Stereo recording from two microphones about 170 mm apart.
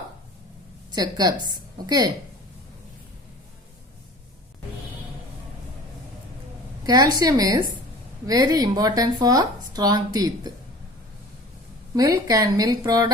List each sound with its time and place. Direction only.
0.9 s speech: 25° right (ahead or behind)
6.8 s speech: 20° right (ahead or behind)
11.9 s speech: 20° right (ahead or behind)